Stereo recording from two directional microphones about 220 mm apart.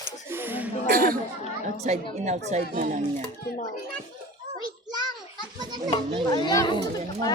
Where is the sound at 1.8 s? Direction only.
30° right (ahead or behind).